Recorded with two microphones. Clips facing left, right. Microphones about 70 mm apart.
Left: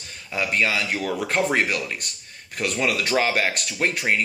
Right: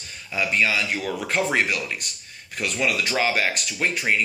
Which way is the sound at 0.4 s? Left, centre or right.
Left.